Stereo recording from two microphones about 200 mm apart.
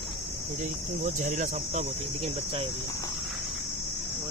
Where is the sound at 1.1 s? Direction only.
35° right (ahead or behind).